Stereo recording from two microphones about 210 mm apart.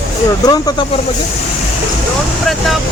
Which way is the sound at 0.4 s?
20° left (ahead or behind).